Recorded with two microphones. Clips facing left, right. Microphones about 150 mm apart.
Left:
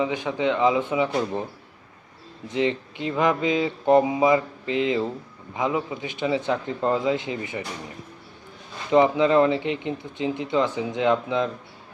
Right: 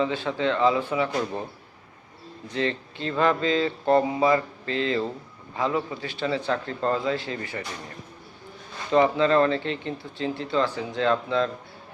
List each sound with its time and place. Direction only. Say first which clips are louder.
0.0 s speech: left 1 dB; 15° left (ahead or behind)
2.5 s speech: left 3 dB; 15° left (ahead or behind)
8.9 s speech: left 2 dB; 15° left (ahead or behind)